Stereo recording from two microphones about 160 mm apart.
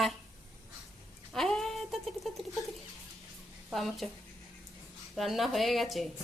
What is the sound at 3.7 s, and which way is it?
Speech, centre (ahead or behind).